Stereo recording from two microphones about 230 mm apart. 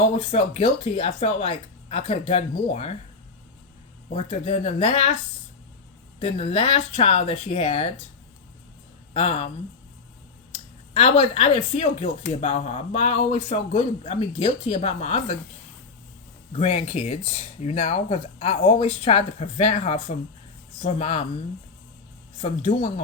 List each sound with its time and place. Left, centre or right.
0.0 s speech: left
4.1 s speech: left
6.1 s speech: left
9.1 s speech: left
10.5 s speech: left
16.5 s speech: left
22.4 s speech: left